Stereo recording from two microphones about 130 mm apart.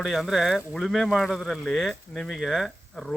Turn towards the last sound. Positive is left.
turn(degrees=0)  # may be behind; listen again after turning